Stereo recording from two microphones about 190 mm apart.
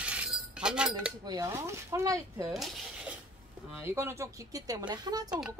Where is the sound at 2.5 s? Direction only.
Centre (ahead or behind).